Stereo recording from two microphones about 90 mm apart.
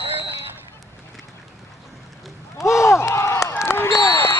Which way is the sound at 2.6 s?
30° left (ahead or behind).